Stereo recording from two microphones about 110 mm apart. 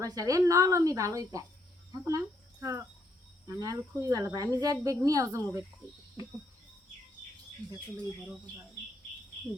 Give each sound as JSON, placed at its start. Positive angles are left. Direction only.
{"t": 0.0, "sound": "a woman's voice", "side_deg": -30}